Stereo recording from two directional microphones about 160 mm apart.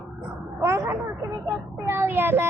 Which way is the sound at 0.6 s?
15° right (ahead or behind).